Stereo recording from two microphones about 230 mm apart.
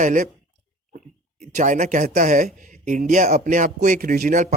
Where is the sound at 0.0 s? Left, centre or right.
Right.